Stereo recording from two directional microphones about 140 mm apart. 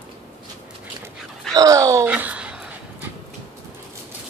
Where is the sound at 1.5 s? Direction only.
25° right (ahead or behind).